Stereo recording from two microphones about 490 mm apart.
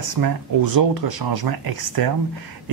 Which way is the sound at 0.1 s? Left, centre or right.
Right.